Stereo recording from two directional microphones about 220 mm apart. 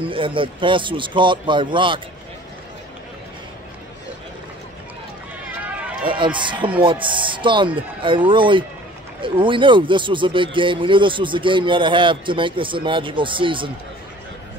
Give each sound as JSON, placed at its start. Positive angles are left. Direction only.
{"t": 0.0, "sound": "speech", "side_deg": -25}
{"t": 6.0, "sound": "speech", "side_deg": -20}